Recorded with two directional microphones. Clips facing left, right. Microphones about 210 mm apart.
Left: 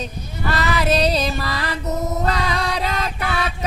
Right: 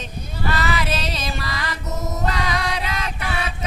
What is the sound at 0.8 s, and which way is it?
Music, 35° left (ahead or behind).